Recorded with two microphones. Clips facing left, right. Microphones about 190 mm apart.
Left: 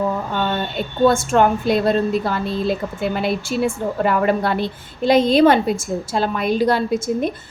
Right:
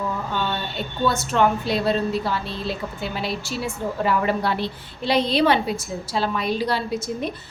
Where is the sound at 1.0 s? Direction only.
50° left (ahead or behind).